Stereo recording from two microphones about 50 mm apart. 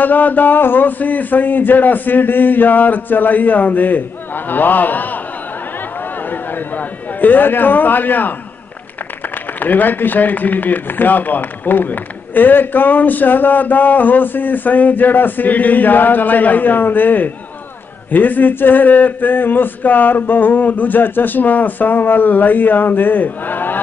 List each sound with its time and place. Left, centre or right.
0.0 s a man's voice: left